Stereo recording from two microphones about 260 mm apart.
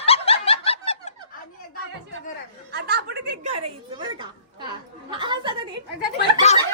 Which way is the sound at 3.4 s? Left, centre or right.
Right.